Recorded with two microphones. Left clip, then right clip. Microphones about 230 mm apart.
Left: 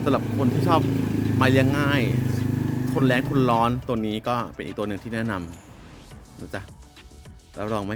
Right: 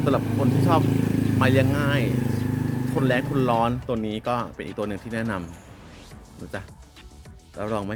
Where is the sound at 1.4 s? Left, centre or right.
Centre.